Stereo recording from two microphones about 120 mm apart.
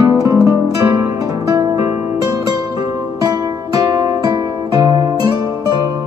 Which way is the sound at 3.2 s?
30° right (ahead or behind).